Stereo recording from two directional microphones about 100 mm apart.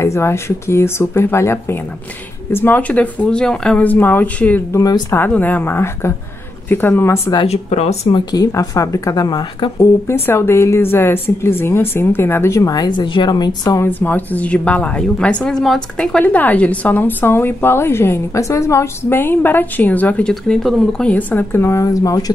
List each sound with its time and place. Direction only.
0.0 s a woman's voice: 25° left (ahead or behind)
4.7 s speech: 40° left (ahead or behind)
5.1 s a woman's voice: 20° left (ahead or behind)
7.4 s speech: 90° left
8.3 s speech: 35° left (ahead or behind); by 9.7 s 55° left (ahead or behind)
9.8 s a woman's voice: 25° left (ahead or behind); by 13.6 s 45° left (ahead or behind)
13.8 s a woman's voice: 20° left (ahead or behind); by 21.1 s centre (ahead or behind)
21.1 s a woman's voice: 15° left (ahead or behind); by 22.2 s 35° left (ahead or behind)